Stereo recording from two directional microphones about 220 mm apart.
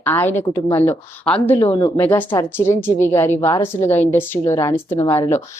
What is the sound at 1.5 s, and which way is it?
Speech, 25° left (ahead or behind).